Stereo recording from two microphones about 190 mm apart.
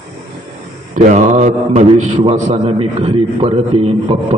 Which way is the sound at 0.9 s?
40° right (ahead or behind).